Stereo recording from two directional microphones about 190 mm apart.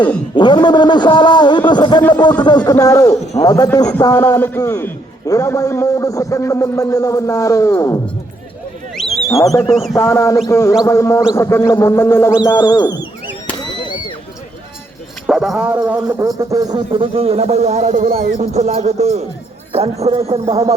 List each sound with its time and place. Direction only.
0.3 s a man's voice: 25° left (ahead or behind)
9.0 s wild animals: centre (ahead or behind)
9.3 s a man's voice: 15° left (ahead or behind)
15.3 s a man's voice: 5° right (ahead or behind); by 20.7 s 30° right (ahead or behind)